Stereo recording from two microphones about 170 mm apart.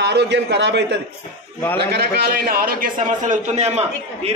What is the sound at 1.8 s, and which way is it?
A man's voice, 70° right (ahead or behind).